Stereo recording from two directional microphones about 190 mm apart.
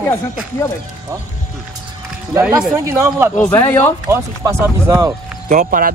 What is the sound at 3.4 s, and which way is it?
Speech, 10° left (ahead or behind).